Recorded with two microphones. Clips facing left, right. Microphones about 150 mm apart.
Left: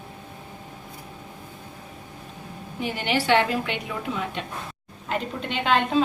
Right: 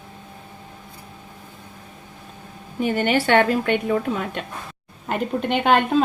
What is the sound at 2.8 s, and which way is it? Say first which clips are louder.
Speech: right 6 dB; 50° right (ahead or behind).